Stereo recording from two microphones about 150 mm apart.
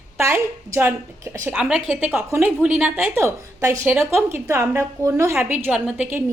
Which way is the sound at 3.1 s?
20° right (ahead or behind).